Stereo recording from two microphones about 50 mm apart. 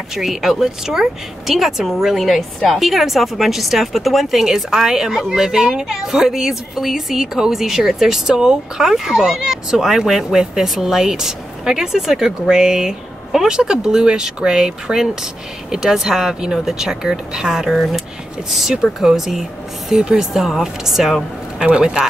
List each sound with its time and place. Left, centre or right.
0.1 s speech: centre
21.5 s speech: centre